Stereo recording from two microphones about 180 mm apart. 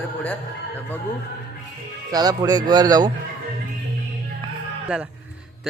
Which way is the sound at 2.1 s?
20° right (ahead or behind).